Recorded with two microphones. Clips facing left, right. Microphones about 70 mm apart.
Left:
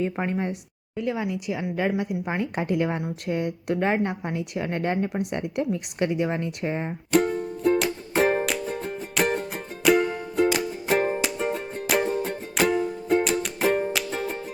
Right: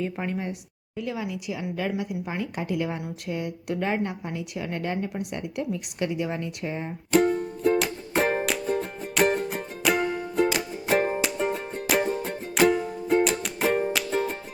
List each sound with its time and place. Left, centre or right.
0.0 s a woman's voice: left
7.1 s music: centre